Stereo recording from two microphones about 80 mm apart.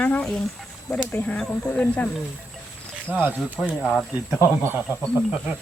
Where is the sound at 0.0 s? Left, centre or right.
Centre.